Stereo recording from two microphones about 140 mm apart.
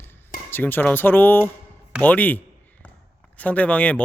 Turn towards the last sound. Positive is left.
turn(degrees=10)  # may be behind; listen again after turning